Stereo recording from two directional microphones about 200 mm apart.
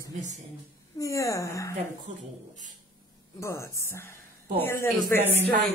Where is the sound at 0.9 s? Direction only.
15° left (ahead or behind).